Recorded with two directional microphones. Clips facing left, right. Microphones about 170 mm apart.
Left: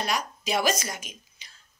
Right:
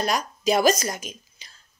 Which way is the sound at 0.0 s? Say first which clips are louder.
Right 6 dB; 40° right (ahead or behind).